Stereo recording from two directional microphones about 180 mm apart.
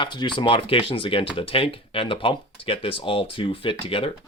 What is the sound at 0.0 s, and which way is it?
Speech, 25° left (ahead or behind).